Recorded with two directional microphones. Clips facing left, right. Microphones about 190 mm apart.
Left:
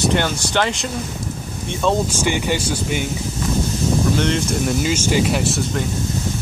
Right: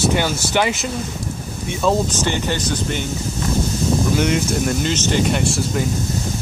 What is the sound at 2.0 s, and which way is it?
Speech, 10° left (ahead or behind).